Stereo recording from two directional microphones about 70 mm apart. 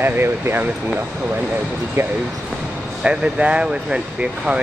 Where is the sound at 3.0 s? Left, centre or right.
Centre.